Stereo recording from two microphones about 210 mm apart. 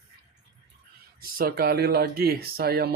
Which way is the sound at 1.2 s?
45° right (ahead or behind).